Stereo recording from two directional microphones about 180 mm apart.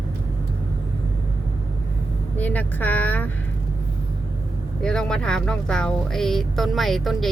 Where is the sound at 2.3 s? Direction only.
10° left (ahead or behind).